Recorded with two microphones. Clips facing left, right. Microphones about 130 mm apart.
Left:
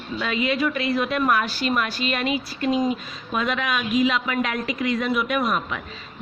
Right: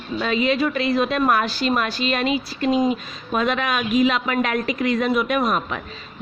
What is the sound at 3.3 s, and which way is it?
A woman's voice, 45° right (ahead or behind).